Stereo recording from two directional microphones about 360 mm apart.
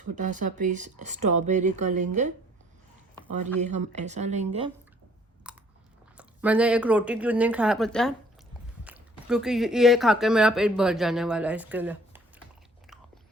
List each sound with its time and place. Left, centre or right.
0.2 s speech: right
3.9 s speech: centre
5.5 s chewing: centre
6.1 s speech: centre